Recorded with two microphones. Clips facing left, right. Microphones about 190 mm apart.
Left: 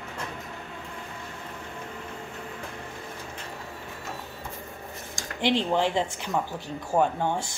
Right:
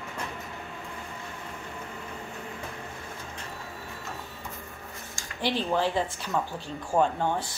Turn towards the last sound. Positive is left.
turn(degrees=10)  # may be behind; listen again after turning